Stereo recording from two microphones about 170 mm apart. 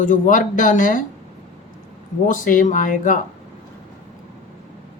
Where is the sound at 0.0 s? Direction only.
50° left (ahead or behind).